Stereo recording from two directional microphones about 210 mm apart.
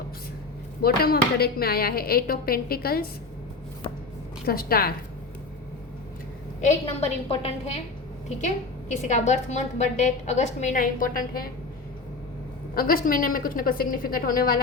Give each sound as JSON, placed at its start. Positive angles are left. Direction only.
{"t": 0.8, "sound": "a woman's voice", "side_deg": 45}
{"t": 4.4, "sound": "a woman's voice", "side_deg": 45}
{"t": 6.6, "sound": "a woman's voice", "side_deg": 35}
{"t": 12.7, "sound": "a woman's voice", "side_deg": 45}